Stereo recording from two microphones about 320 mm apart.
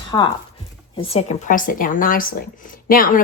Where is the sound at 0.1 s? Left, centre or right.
Centre.